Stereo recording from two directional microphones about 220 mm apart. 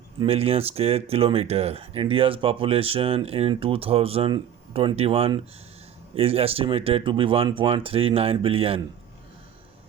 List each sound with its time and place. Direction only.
0.2 s speech: 25° right (ahead or behind)